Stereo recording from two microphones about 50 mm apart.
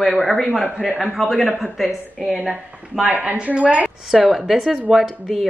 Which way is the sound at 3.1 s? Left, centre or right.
Right.